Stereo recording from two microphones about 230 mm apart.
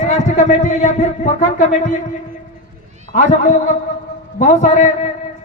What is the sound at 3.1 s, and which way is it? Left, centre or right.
A man's voice, left.